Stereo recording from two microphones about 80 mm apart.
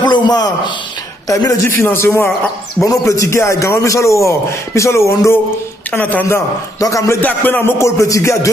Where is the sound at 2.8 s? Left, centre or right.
Left.